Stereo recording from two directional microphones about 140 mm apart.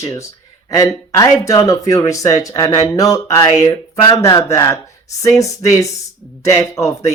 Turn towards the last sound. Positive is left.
turn(degrees=20)  # may be behind; listen again after turning